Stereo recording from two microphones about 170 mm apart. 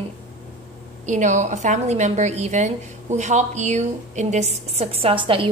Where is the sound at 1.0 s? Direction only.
45° right (ahead or behind).